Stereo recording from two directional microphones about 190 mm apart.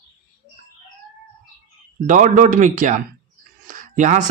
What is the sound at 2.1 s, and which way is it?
Speech, 40° right (ahead or behind).